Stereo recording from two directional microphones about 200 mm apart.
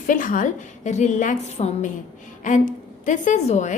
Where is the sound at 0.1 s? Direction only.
40° left (ahead or behind).